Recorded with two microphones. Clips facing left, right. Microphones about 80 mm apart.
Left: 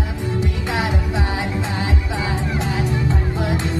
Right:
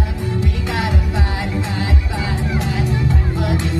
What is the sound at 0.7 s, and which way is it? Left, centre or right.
Music, left.